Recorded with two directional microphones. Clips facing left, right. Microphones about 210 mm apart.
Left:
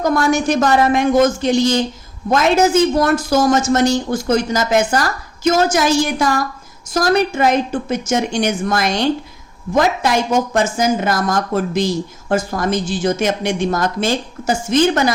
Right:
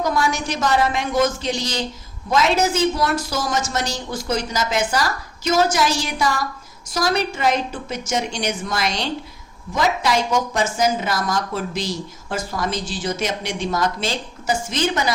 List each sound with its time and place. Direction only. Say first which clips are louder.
0.0 s a woman's voice: left 6 dB; 50° left (ahead or behind)